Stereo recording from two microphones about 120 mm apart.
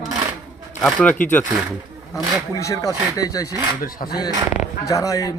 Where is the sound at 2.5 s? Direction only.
25° left (ahead or behind).